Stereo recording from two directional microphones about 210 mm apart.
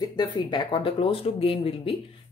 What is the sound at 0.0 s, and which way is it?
A woman's voice, 20° left (ahead or behind).